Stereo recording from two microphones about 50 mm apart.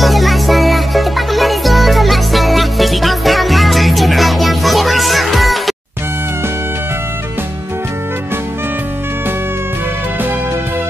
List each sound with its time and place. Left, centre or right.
0.0 s music: centre